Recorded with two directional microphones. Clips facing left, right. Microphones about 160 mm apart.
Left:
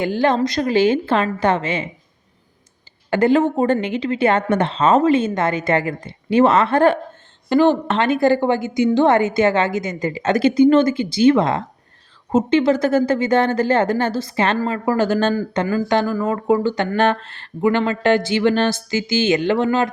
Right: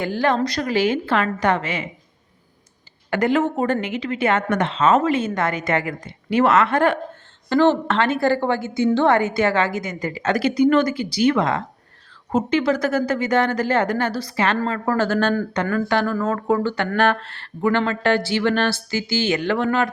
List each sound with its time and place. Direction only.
0.0 s speech: 20° left (ahead or behind)
3.1 s speech: 30° left (ahead or behind)
7.5 s speech: 15° left (ahead or behind)